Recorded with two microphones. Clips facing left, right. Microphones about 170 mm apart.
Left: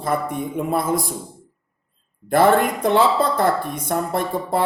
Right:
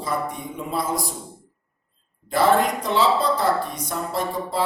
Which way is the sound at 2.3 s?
55° left (ahead or behind).